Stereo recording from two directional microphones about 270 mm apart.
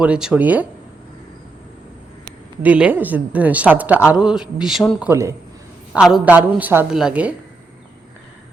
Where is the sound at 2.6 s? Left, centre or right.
Centre.